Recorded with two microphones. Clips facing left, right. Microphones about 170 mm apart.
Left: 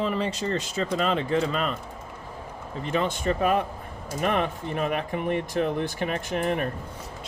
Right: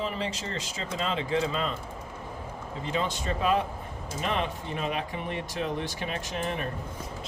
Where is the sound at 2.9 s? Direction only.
60° left (ahead or behind).